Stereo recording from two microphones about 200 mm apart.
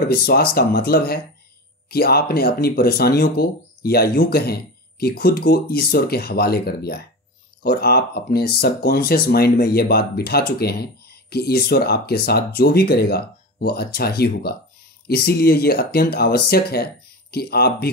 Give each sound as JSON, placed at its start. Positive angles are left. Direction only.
{"t": 0.1, "sound": "speech", "side_deg": 50}